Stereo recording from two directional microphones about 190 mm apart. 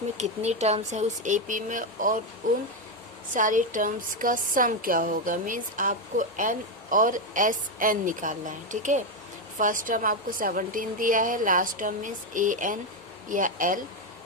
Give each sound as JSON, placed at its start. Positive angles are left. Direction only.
{"t": 0.2, "sound": "speech", "side_deg": -35}